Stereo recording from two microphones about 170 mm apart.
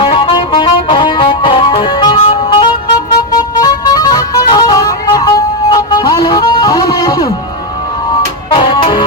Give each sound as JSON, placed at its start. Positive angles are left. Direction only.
{"t": 0.0, "sound": "music", "side_deg": 30}
{"t": 8.5, "sound": "music", "side_deg": 30}